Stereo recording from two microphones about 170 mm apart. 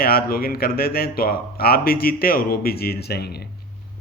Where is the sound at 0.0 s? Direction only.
60° left (ahead or behind).